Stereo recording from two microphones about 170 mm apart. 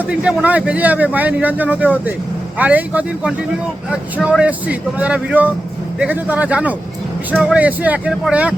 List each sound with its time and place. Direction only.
0.1 s a man's voice: 5° right (ahead or behind)